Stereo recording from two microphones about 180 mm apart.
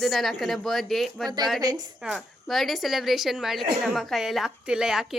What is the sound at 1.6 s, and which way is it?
Speech, 20° right (ahead or behind).